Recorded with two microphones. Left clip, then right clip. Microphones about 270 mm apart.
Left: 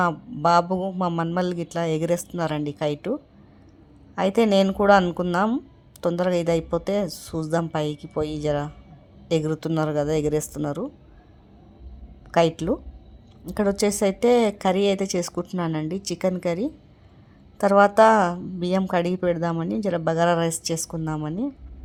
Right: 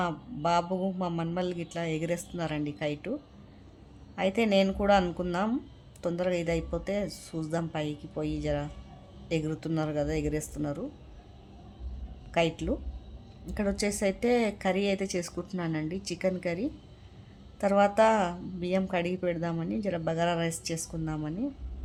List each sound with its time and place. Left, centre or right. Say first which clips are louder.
0.0 s a woman's voice: left 9 dB; left
12.3 s a woman's voice: left 8 dB; left